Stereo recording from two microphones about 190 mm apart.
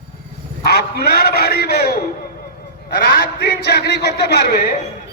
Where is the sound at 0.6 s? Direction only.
55° left (ahead or behind).